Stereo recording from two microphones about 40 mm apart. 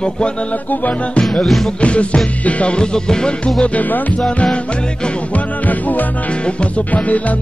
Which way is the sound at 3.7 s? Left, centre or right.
Left.